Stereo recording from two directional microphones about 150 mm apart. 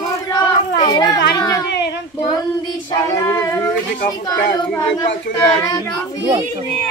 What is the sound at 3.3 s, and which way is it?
Speech, 20° left (ahead or behind).